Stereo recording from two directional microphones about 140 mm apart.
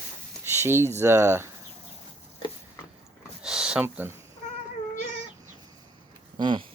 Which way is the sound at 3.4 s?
5° right (ahead or behind).